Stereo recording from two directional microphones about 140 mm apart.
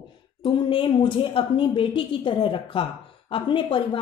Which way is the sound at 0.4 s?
35° left (ahead or behind).